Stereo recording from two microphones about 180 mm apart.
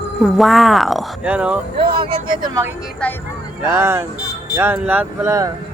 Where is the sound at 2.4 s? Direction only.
20° right (ahead or behind).